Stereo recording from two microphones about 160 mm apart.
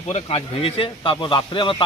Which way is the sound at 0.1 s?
35° left (ahead or behind).